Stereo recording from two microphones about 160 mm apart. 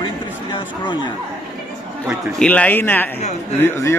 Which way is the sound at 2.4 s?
10° left (ahead or behind).